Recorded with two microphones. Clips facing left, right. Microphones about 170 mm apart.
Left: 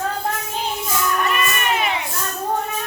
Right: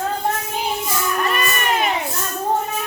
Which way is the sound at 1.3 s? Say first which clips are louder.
Right 1 dB; 35° right (ahead or behind).